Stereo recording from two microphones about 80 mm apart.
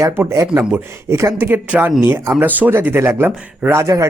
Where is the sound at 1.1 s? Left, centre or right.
Right.